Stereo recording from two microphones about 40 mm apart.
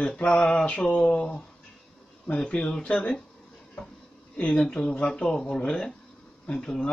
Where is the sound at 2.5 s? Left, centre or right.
Left.